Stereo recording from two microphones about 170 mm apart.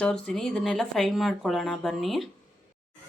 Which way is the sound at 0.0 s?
5° left (ahead or behind).